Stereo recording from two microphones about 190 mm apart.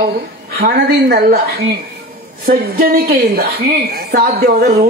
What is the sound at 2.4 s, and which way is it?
Speech, 50° right (ahead or behind).